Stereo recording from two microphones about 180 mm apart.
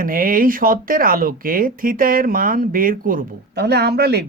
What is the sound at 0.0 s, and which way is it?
Speech, 50° right (ahead or behind).